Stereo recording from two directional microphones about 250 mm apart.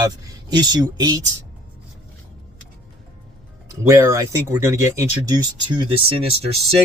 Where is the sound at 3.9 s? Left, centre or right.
Centre.